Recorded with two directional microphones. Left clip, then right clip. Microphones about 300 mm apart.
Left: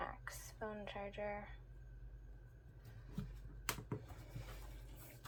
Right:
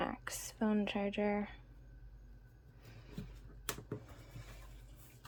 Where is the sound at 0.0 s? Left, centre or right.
Right.